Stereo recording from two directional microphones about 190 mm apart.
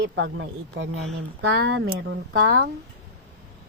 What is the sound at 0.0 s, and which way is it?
Speech, 75° right (ahead or behind).